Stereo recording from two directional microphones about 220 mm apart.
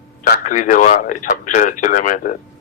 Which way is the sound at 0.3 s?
35° left (ahead or behind).